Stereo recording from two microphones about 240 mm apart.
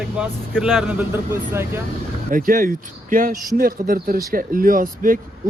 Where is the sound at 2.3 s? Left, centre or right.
Right.